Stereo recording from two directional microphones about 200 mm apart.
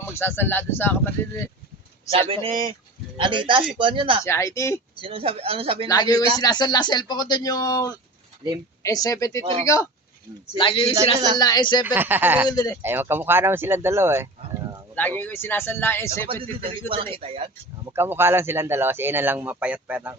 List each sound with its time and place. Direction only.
0.1 s speech: 10° left (ahead or behind)
2.0 s speech: 25° right (ahead or behind)
4.2 s speech: 15° left (ahead or behind)
4.9 s speech: 25° right (ahead or behind)
5.9 s speech: 20° left (ahead or behind)
9.4 s speech: 25° right (ahead or behind)
10.6 s speech: 25° left (ahead or behind)
11.9 s speech: 10° right (ahead or behind)
12.5 s speech: 15° left (ahead or behind)
12.8 s speech: 10° right (ahead or behind)
14.9 s speech: 10° left (ahead or behind)
16.3 s speech: 25° right (ahead or behind)
17.9 s speech: 10° right (ahead or behind)